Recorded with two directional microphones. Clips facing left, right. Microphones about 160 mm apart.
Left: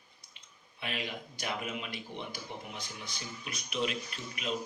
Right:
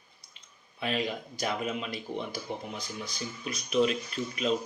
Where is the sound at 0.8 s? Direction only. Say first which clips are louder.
Right 7 dB; 35° right (ahead or behind).